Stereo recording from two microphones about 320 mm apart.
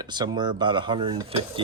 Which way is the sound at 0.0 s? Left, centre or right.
Centre.